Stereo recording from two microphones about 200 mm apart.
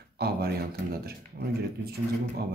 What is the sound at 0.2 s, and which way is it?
Speech, 50° right (ahead or behind).